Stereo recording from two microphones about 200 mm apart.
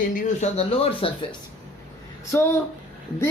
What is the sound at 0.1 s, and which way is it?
Speech, 40° left (ahead or behind).